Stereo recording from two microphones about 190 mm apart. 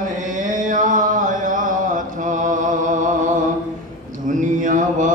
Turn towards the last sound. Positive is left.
turn(degrees=-40)  # may be behind; listen again after turning